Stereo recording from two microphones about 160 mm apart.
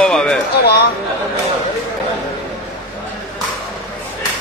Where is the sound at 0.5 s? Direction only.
90° left.